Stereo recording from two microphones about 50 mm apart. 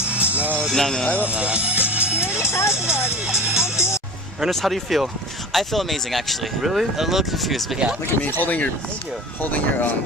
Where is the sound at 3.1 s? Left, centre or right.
Centre.